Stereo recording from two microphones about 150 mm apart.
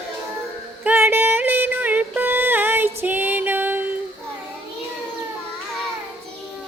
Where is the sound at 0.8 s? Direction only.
15° right (ahead or behind).